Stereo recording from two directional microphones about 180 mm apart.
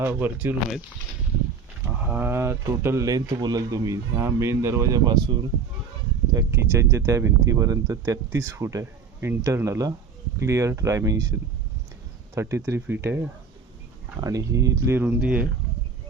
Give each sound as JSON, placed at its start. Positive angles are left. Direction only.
{"t": 0.0, "sound": "speech", "side_deg": -10}
{"t": 2.0, "sound": "speech", "side_deg": -10}
{"t": 6.3, "sound": "speech", "side_deg": -15}